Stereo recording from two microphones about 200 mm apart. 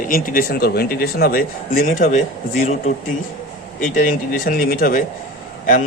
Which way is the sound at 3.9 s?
40° left (ahead or behind).